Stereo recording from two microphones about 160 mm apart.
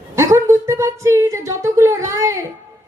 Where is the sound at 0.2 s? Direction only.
15° right (ahead or behind).